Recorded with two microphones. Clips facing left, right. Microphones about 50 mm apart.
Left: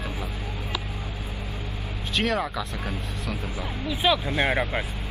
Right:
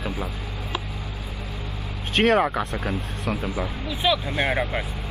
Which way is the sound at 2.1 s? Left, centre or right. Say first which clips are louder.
Right 7 dB; right.